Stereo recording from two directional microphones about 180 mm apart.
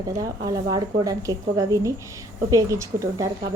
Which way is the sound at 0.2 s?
20° right (ahead or behind).